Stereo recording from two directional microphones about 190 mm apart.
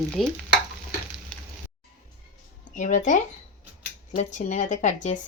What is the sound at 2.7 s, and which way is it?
Speech, 40° left (ahead or behind).